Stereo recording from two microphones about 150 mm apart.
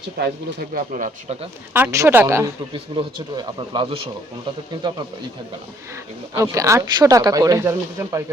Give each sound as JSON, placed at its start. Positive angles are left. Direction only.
{"t": 0.2, "sound": "speech", "side_deg": -90}
{"t": 0.7, "sound": "speech", "side_deg": -60}
{"t": 1.7, "sound": "speech", "side_deg": -15}
{"t": 2.7, "sound": "speech", "side_deg": -35}
{"t": 6.3, "sound": "speech", "side_deg": -20}